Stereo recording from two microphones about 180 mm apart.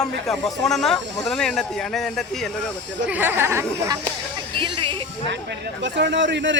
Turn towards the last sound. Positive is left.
turn(degrees=-85)